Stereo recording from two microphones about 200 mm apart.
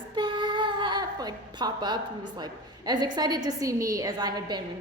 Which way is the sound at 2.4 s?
20° right (ahead or behind).